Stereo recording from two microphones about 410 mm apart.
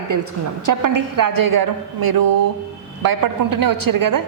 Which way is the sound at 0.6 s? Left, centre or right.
Right.